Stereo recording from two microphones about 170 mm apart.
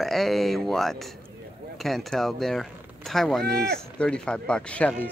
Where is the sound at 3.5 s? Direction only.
70° right (ahead or behind).